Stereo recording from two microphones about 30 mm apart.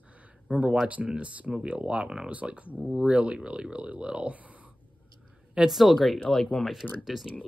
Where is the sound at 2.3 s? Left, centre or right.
Right.